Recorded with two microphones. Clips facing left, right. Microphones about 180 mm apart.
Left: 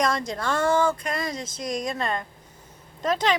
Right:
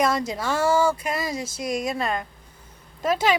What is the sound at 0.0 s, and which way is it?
Speech, 5° right (ahead or behind).